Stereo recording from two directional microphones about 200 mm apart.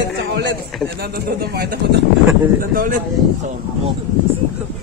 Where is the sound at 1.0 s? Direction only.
50° right (ahead or behind).